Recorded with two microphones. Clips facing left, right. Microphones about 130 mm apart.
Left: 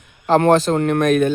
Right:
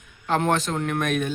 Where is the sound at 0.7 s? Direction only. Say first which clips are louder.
Left 9 dB; 50° left (ahead or behind).